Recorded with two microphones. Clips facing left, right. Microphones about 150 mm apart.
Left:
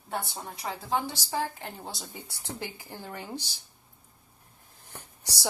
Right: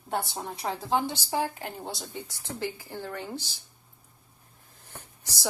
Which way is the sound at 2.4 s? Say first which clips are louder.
Right 4 dB; 15° left (ahead or behind).